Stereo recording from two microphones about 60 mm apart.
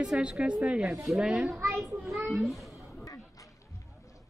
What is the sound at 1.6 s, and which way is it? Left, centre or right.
Speech, right.